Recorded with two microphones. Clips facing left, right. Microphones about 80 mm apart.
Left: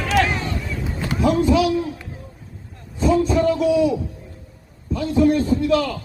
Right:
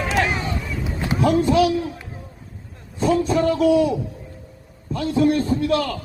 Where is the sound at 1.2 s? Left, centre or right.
Right.